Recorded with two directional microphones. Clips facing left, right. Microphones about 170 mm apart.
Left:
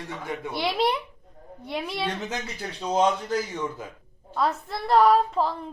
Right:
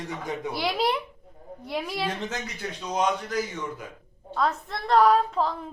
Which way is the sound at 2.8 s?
30° left (ahead or behind).